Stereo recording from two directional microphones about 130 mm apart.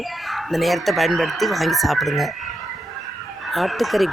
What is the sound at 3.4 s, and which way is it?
Speech, centre (ahead or behind).